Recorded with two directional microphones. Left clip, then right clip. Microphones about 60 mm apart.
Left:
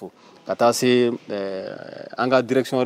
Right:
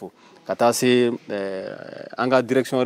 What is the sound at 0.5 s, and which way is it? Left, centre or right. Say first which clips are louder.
Speech: even; right.